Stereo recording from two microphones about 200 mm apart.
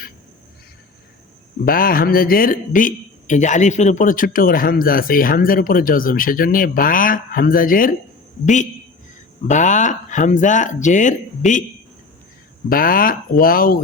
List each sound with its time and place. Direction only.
1.6 s speech: 45° left (ahead or behind)
9.5 s speech: 40° left (ahead or behind)
12.6 s speech: 45° left (ahead or behind)